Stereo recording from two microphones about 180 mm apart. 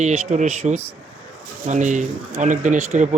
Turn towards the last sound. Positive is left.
turn(degrees=-40)  # may be behind; listen again after turning